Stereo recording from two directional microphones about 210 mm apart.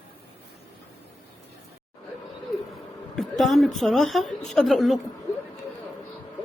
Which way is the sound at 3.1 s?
Centre (ahead or behind).